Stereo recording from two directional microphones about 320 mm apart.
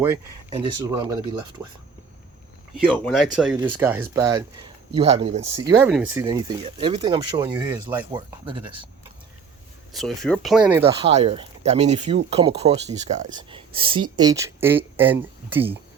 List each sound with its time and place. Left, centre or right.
0.0 s speech: centre
2.9 s speech: centre
9.9 s speech: centre
11.0 s speech: centre